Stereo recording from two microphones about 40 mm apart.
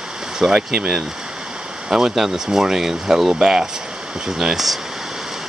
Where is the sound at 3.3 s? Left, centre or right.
Centre.